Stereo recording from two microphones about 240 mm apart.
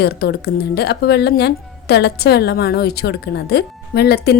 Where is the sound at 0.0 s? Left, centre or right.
Left.